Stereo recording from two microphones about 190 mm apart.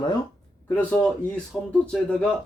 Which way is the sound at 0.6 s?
10° left (ahead or behind).